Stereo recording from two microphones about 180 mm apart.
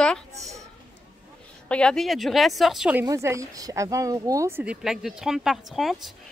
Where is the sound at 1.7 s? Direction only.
5° left (ahead or behind).